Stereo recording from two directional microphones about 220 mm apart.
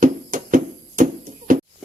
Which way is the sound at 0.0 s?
35° right (ahead or behind).